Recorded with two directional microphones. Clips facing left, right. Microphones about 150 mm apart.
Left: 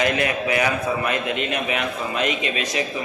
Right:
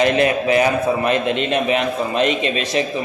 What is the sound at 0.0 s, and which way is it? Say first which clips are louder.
A man's voice: right 6 dB; 25° right (ahead or behind).